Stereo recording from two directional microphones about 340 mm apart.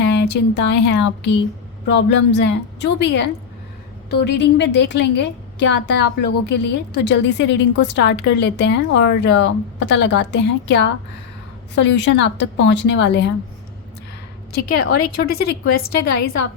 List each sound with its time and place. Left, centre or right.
0.0 s a woman's voice: left
4.4 s a woman's voice: left
14.5 s a woman's voice: left
15.9 s a woman's voice: left